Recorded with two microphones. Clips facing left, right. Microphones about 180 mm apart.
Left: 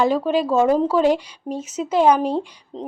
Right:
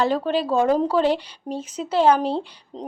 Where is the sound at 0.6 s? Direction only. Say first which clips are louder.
Left 2 dB; 10° left (ahead or behind).